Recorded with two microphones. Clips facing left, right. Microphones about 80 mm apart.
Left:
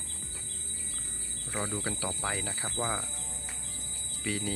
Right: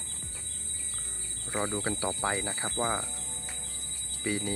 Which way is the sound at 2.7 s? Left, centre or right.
Centre.